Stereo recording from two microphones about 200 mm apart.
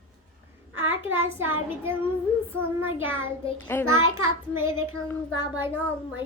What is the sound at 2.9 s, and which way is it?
Child singing, 90° right.